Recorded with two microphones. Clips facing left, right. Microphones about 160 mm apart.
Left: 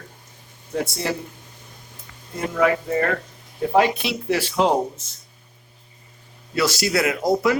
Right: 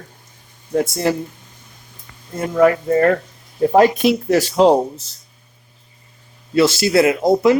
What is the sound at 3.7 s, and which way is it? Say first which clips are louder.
Speech: right 6 dB; 45° right (ahead or behind).